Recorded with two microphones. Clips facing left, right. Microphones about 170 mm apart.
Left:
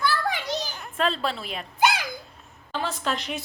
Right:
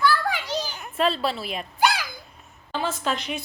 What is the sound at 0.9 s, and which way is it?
Speech, 10° right (ahead or behind).